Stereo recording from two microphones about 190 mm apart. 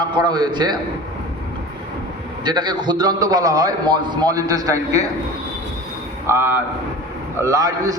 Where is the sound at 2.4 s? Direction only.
25° right (ahead or behind).